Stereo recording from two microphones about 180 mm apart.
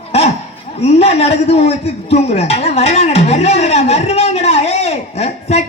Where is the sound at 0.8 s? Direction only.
35° left (ahead or behind).